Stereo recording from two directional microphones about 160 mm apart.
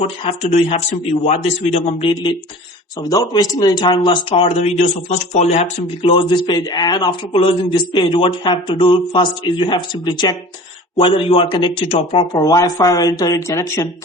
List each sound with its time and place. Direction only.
0.0 s speech: 40° left (ahead or behind)
3.0 s speech: 25° left (ahead or behind)